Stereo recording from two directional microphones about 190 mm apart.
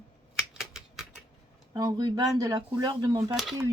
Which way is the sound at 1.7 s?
20° right (ahead or behind).